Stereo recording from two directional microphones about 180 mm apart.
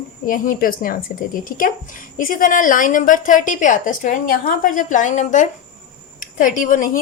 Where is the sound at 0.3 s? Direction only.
50° left (ahead or behind).